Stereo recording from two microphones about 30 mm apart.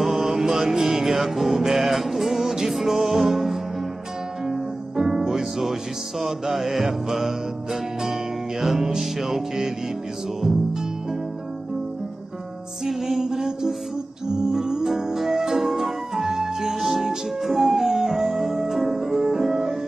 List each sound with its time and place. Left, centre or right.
0.0 s music: centre
10.7 s music: right
12.8 s music: centre